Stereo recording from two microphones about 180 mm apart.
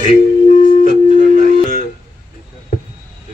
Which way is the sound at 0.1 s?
40° left (ahead or behind).